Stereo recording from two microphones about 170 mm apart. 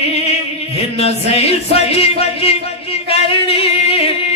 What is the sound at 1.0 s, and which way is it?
Music, 40° left (ahead or behind).